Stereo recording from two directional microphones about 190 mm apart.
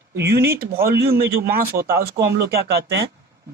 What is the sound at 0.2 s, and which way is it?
Speech, 60° right (ahead or behind).